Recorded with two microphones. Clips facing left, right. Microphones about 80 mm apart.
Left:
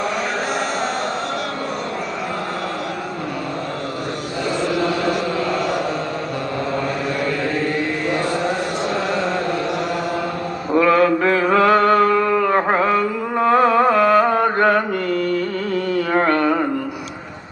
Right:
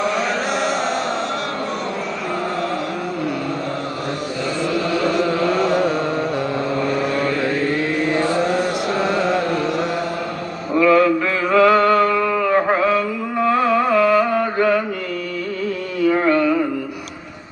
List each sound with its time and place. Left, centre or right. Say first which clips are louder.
10.8 s a sound: right 1 dB; left
12.5 s mantra: even; left
16.0 s music: right 3 dB; left